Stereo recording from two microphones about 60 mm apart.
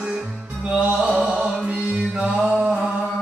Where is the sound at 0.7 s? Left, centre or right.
Centre.